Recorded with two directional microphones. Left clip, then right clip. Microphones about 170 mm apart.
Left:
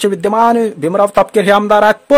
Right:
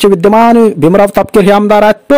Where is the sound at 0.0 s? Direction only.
35° right (ahead or behind).